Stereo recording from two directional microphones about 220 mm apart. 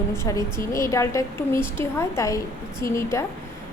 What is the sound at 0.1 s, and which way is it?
A woman's voice, 15° left (ahead or behind).